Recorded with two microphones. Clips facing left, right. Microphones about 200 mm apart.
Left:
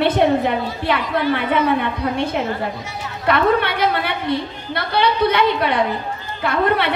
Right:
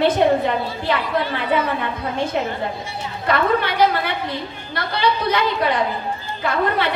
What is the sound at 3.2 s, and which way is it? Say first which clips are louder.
A woman's voice: left 2 dB; 60° left (ahead or behind).